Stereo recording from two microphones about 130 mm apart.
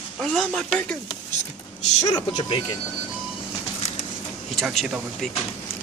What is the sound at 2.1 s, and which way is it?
Speech, 35° left (ahead or behind).